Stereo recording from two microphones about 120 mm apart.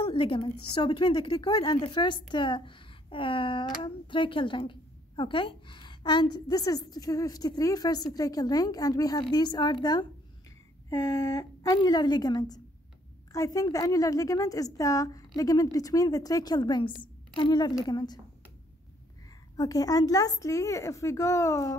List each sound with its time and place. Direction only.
0.0 s a woman's voice: 45° left (ahead or behind)
10.9 s speech: 25° left (ahead or behind)
11.8 s a woman's voice: 35° left (ahead or behind)
19.5 s a woman's voice: 30° left (ahead or behind)